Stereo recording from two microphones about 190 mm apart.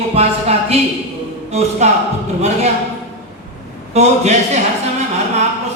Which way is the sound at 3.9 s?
35° right (ahead or behind).